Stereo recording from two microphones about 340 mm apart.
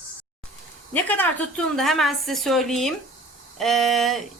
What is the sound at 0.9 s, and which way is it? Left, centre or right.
Speech, centre.